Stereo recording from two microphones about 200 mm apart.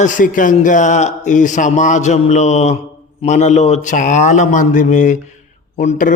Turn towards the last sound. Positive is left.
turn(degrees=40)  # may be behind; listen again after turning